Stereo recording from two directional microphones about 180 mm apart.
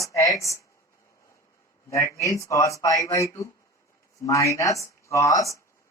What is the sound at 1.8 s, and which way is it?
Speech, 15° left (ahead or behind).